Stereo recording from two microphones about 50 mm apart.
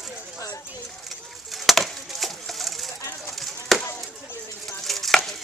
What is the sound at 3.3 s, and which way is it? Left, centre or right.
Chop, centre.